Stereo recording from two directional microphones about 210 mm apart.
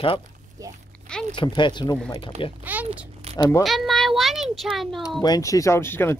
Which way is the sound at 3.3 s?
30° right (ahead or behind).